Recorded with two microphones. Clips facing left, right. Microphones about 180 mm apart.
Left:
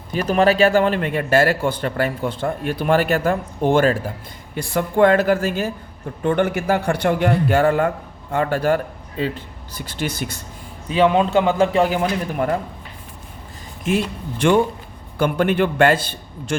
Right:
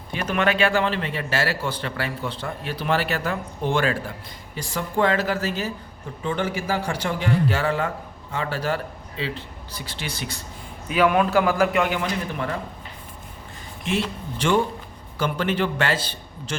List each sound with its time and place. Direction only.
0.1 s a man's voice: 35° left (ahead or behind)
4.5 s a man's voice: 55° left (ahead or behind)
10.8 s a man's voice: 25° left (ahead or behind)
15.2 s a man's voice: 55° left (ahead or behind)